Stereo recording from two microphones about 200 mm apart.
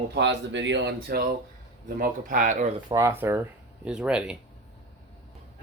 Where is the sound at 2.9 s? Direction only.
15° right (ahead or behind).